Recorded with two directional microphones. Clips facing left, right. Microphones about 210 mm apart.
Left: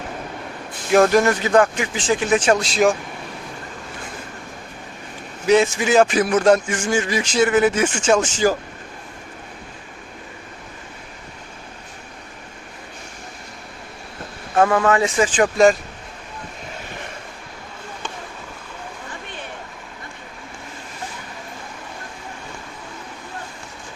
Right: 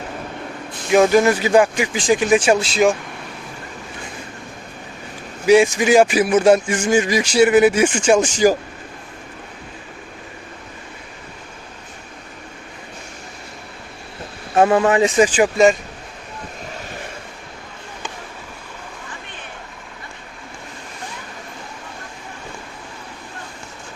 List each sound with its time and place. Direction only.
0.9 s speech: centre (ahead or behind)
5.5 s speech: 15° right (ahead or behind)
14.5 s speech: 20° right (ahead or behind)
15.4 s speech: centre (ahead or behind)